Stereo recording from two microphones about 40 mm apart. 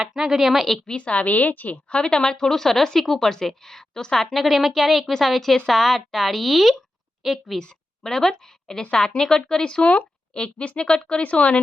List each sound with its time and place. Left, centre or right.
0.1 s speech: centre
0.9 s a woman's voice: left
2.0 s a woman's voice: centre
4.3 s speech: centre
8.0 s a woman's voice: centre
11.2 s a woman's voice: left